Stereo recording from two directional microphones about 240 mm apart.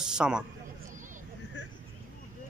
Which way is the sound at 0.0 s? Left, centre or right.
Centre.